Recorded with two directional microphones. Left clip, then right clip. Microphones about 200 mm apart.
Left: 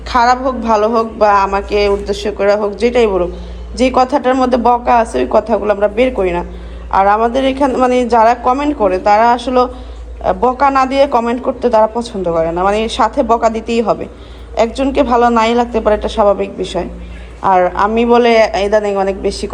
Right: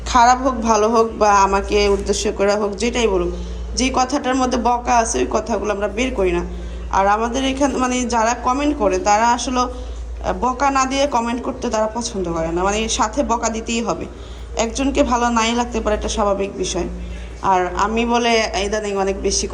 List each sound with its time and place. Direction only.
0.1 s a man's voice: 15° right (ahead or behind)